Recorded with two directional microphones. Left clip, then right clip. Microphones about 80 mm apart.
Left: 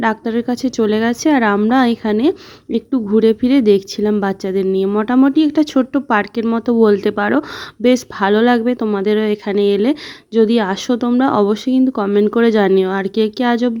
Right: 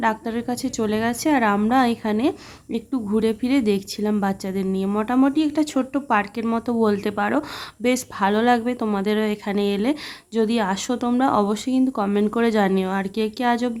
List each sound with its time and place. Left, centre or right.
0.0 s speech: left